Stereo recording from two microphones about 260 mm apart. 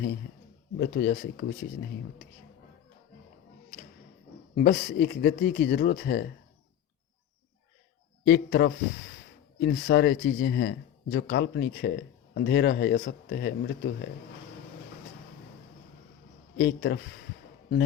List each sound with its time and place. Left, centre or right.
0.8 s speech: left
4.5 s speech: left
8.2 s speech: left
16.6 s speech: left